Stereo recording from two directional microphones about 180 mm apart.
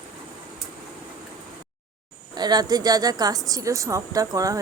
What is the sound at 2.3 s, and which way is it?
A woman's voice, 20° right (ahead or behind).